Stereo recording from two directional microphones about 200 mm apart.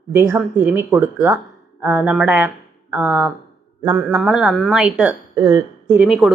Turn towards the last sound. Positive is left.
turn(degrees=0)  # may be behind; listen again after turning